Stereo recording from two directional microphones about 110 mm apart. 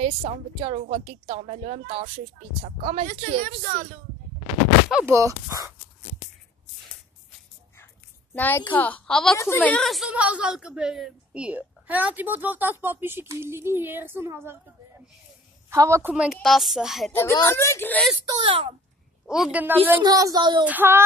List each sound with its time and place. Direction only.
0.0 s a woman's voice: 60° right (ahead or behind)
5.0 s speech: 25° right (ahead or behind)
8.4 s a woman's voice: 15° left (ahead or behind)
9.4 s speech: 25° left (ahead or behind)
9.7 s speech: 5° left (ahead or behind)
10.1 s a woman's voice: 10° right (ahead or behind)
15.7 s speech: 25° right (ahead or behind)
16.1 s a woman's voice: 10° right (ahead or behind)
17.1 s speech: 25° left (ahead or behind)
18.4 s speech: 60° right (ahead or behind)
19.2 s a woman's voice: 5° right (ahead or behind)
19.6 s a woman's voice: 15° right (ahead or behind)
20.0 s speech: 35° right (ahead or behind)
20.6 s a woman's voice: 20° right (ahead or behind)